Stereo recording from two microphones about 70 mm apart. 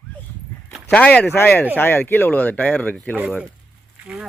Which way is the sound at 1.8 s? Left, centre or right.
Left.